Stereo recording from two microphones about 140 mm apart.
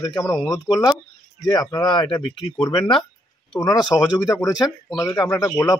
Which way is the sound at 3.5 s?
30° left (ahead or behind).